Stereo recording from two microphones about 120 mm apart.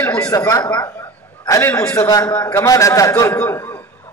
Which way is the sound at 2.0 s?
30° left (ahead or behind).